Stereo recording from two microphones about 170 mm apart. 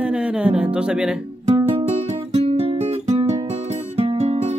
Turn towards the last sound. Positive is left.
turn(degrees=-40)  # may be behind; listen again after turning